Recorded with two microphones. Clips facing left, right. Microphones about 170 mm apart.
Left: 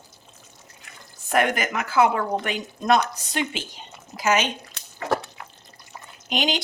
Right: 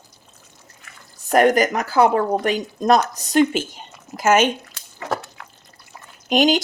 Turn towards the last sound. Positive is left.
turn(degrees=-45)  # may be behind; listen again after turning